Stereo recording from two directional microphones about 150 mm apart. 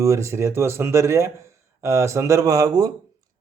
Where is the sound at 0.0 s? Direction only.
20° right (ahead or behind).